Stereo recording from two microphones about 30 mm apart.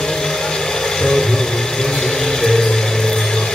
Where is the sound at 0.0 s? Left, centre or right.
Centre.